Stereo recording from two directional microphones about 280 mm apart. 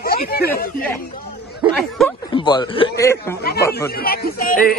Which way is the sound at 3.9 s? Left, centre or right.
Left.